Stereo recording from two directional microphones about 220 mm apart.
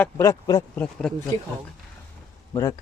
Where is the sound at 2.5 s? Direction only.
15° left (ahead or behind).